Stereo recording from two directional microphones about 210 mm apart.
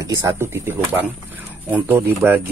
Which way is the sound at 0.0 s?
15° right (ahead or behind).